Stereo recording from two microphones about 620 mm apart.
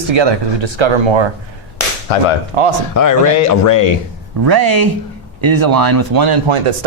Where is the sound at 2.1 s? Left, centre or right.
Left.